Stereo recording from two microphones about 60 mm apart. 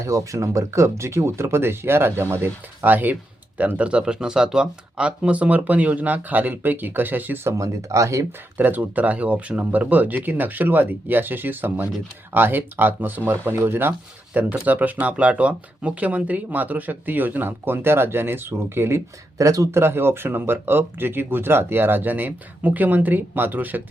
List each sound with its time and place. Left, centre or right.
0.0 s speech: right
7.4 s speech: right
8.5 s speech: right
14.5 s speech: right
19.4 s speech: right
19.7 s speech: right